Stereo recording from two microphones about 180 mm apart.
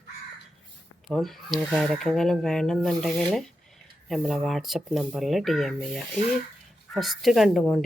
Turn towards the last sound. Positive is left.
turn(degrees=0)  # may be behind; listen again after turning